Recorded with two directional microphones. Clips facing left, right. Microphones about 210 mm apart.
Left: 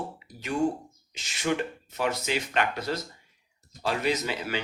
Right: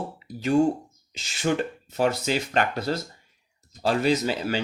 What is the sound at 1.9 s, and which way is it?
Speech, 35° right (ahead or behind).